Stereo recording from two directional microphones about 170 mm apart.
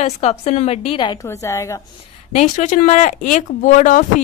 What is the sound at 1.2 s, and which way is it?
Speech, 15° left (ahead or behind).